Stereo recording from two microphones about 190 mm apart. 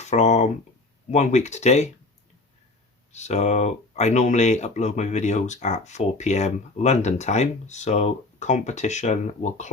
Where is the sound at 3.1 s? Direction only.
35° left (ahead or behind).